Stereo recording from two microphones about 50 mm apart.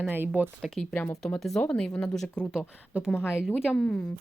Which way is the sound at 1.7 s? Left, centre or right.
Left.